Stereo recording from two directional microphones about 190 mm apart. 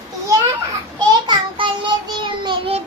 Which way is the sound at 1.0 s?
25° right (ahead or behind).